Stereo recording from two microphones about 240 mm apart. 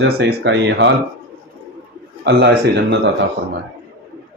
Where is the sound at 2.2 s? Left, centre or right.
Right.